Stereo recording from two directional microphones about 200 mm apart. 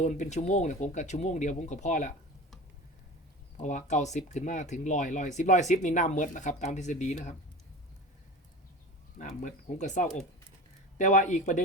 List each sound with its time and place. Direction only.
0.0 s speech: 35° left (ahead or behind)
3.6 s speech: 35° left (ahead or behind)
9.1 s speech: 40° left (ahead or behind)